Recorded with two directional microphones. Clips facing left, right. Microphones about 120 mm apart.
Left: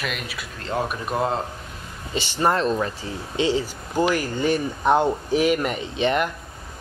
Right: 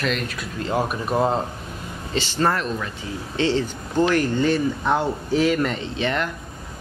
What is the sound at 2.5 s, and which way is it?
Speech, 35° left (ahead or behind).